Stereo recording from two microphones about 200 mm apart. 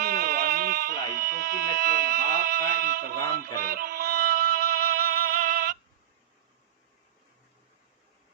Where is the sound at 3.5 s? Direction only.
45° right (ahead or behind).